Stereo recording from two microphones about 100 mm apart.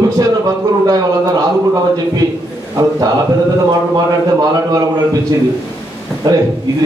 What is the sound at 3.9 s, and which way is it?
Speech, 40° right (ahead or behind).